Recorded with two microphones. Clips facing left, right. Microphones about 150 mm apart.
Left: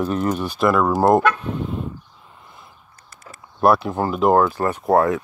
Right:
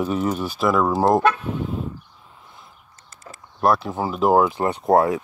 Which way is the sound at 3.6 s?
Centre (ahead or behind).